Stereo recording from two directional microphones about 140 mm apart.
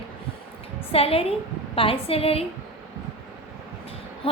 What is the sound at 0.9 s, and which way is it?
A woman's voice, 45° left (ahead or behind).